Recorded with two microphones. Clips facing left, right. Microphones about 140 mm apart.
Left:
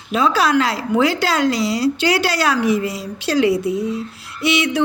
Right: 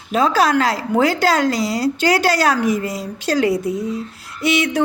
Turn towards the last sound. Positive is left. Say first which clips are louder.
# even
turn(degrees=-45)  # may be behind; listen again after turning